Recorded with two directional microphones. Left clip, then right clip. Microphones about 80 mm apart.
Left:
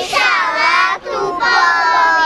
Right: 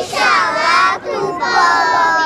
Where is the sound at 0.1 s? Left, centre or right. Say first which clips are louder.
Right 1 dB; centre.